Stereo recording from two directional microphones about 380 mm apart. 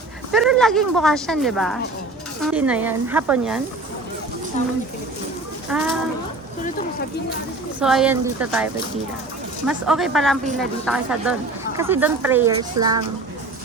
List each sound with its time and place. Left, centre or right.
0.3 s speech: centre
4.6 s speech: centre
5.7 s speech: centre
7.8 s speech: centre
12.8 s speech: right